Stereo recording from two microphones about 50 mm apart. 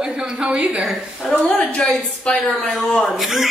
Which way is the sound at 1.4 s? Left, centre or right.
Centre.